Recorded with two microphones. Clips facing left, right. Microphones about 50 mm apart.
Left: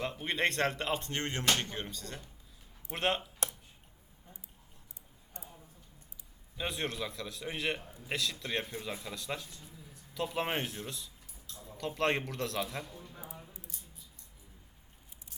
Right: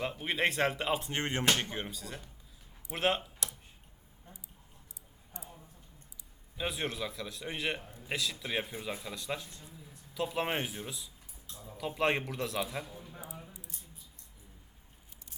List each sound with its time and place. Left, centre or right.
0.0 s speech: centre
5.3 s a sound: left
6.6 s speech: centre
9.5 s speech: right
10.2 s a man's voice: centre